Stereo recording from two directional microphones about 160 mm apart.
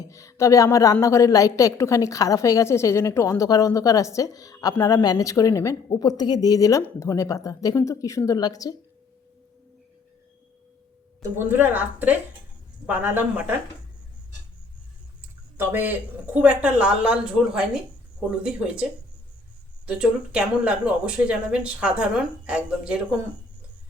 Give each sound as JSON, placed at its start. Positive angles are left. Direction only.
{"t": 0.1, "sound": "a woman's voice", "side_deg": 20}
{"t": 11.2, "sound": "speech", "side_deg": -15}
{"t": 15.5, "sound": "speech", "side_deg": -10}